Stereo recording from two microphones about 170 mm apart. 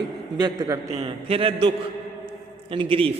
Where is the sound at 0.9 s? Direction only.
35° right (ahead or behind).